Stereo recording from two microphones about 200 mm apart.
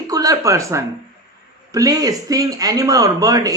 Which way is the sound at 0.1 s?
15° right (ahead or behind).